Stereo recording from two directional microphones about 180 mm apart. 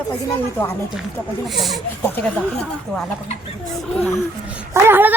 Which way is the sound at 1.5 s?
Centre (ahead or behind).